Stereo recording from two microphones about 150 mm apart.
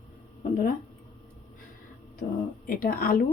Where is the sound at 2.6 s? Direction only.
70° left (ahead or behind).